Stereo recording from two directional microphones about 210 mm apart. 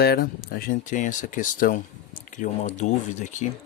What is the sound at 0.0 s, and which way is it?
Speech, 50° left (ahead or behind).